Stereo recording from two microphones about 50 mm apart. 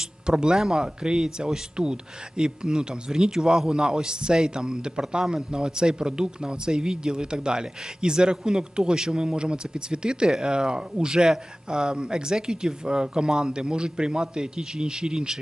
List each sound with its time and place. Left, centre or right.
0.0 s speech: centre